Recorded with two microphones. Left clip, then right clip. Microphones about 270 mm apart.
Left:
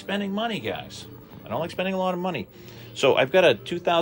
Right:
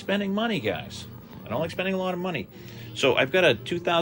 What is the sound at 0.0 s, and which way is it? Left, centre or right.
Speech, centre.